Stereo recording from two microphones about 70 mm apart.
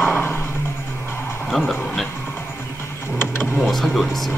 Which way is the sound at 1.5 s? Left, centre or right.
Centre.